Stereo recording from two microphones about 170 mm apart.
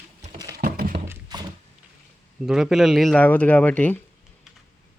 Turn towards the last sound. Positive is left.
turn(degrees=10)  # may be behind; listen again after turning